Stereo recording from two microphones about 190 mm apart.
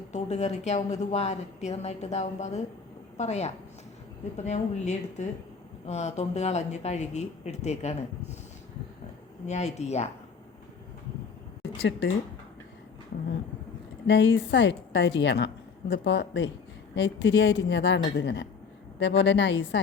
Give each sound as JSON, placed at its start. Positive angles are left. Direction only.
{"t": 0.1, "sound": "a woman's voice", "side_deg": 35}
{"t": 9.5, "sound": "a woman's voice", "side_deg": 35}
{"t": 11.8, "sound": "a woman's voice", "side_deg": 65}
{"t": 14.1, "sound": "a woman's voice", "side_deg": 70}